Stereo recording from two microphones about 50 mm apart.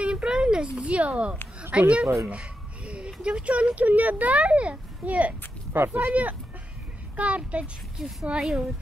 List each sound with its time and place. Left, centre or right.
0.0 s a sound: centre
0.7 s speech: right
2.2 s a sound: right
3.2 s speech: right
5.7 s speech: right
7.2 s speech: right
8.0 s a woman's voice: centre